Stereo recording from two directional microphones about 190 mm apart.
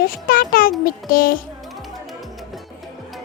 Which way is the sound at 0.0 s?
50° left (ahead or behind).